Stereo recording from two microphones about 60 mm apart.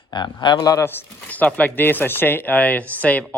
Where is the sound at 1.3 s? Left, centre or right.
Left.